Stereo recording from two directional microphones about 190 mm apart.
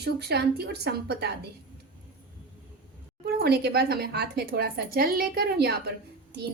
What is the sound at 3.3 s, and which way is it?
A woman's voice, 55° right (ahead or behind).